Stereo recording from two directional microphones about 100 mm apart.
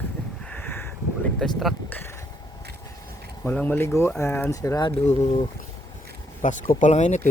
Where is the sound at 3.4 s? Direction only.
15° left (ahead or behind); by 4.8 s 35° left (ahead or behind).